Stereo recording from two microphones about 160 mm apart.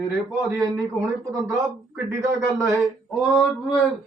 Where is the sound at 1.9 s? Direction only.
15° right (ahead or behind).